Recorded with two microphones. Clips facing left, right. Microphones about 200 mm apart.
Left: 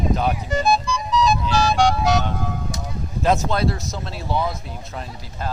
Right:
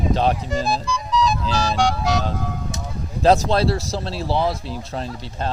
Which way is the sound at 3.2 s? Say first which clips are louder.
Right 4 dB; 35° right (ahead or behind).